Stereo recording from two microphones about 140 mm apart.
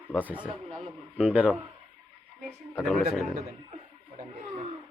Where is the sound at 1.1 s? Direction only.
10° right (ahead or behind).